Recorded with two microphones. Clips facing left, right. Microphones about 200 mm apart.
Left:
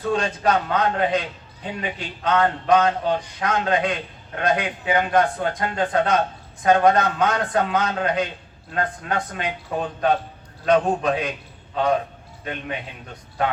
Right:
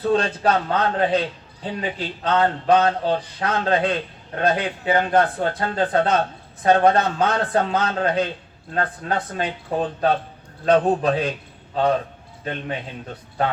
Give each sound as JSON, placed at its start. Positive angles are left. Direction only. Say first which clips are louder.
{"t": 0.4, "sound": "a man's voice", "louder": "even", "side_deg": -30}